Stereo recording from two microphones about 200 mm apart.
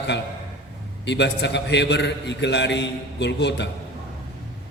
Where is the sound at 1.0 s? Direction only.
60° left (ahead or behind).